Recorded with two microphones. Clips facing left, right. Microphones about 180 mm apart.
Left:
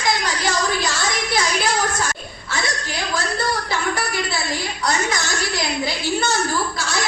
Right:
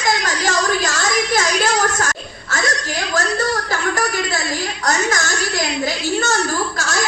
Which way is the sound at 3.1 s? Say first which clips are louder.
Right 4 dB; 45° right (ahead or behind).